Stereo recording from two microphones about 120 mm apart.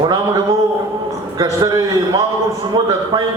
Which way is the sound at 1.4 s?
30° right (ahead or behind).